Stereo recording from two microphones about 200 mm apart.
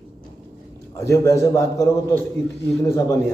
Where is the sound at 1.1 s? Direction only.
15° left (ahead or behind).